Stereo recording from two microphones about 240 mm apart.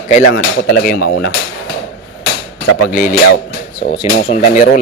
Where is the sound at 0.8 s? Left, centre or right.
Left.